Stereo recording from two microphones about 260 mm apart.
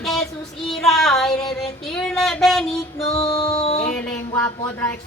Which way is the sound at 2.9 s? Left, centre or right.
Left.